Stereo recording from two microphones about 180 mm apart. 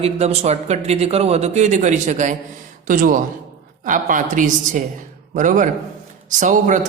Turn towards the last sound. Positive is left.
turn(degrees=-45)  # may be behind; listen again after turning